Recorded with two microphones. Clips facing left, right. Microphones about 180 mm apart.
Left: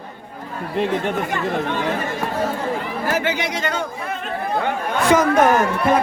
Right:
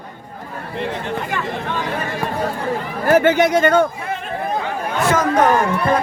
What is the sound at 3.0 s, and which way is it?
Speech, 50° right (ahead or behind).